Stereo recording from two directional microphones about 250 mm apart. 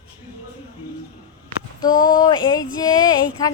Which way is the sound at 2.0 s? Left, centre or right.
Centre.